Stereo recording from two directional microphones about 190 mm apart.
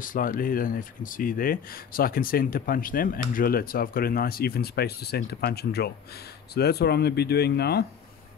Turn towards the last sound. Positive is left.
turn(degrees=55)  # may be behind; listen again after turning